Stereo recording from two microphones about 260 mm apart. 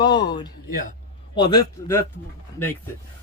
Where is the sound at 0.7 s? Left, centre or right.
Left.